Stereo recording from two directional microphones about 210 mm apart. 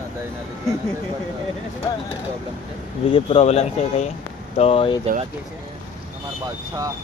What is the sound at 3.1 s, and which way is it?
Speech, 30° left (ahead or behind).